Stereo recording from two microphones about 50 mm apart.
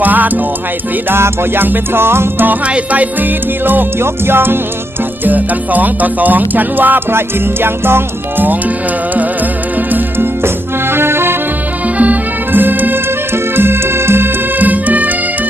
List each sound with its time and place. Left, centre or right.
0.0 s music: right
1.1 s music: right
2.6 s music: right
3.6 s music: right
5.2 s music: right
7.2 s music: right
9.7 s music: right
10.4 s music: right
11.9 s music: right
13.3 s music: right
14.6 s music: right